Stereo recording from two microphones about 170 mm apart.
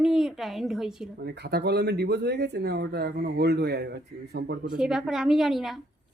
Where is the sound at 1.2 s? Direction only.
75° right (ahead or behind).